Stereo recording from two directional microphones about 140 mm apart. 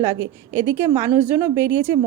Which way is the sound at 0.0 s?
20° right (ahead or behind).